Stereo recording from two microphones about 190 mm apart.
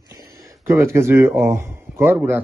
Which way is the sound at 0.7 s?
15° right (ahead or behind).